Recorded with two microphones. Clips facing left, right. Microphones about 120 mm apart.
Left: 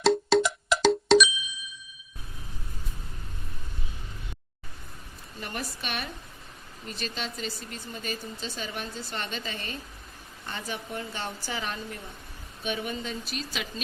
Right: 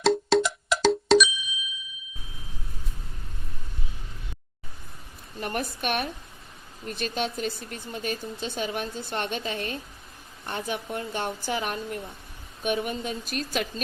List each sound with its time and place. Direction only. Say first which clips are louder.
0.0 s music: even; centre (ahead or behind)
5.4 s speech: right 6 dB; 55° right (ahead or behind)